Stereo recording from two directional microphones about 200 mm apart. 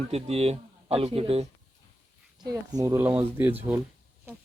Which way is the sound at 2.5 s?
15° right (ahead or behind).